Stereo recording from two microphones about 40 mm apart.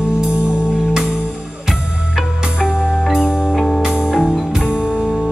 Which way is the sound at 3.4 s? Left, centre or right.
Centre.